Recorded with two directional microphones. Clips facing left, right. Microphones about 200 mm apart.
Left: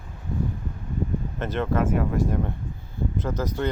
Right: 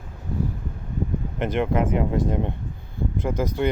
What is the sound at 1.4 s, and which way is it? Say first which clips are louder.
Speech: right 3 dB; 15° right (ahead or behind).